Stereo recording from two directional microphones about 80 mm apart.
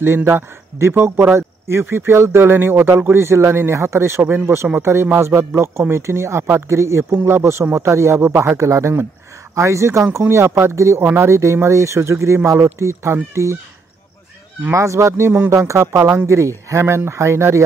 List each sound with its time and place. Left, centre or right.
0.0 s speech: right
14.7 s speech: right